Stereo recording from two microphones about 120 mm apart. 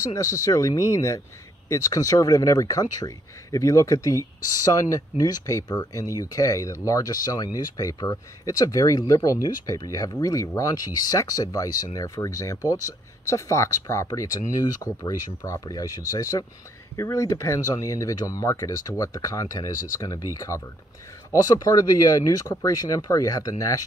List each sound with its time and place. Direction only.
0.1 s speech: 30° left (ahead or behind)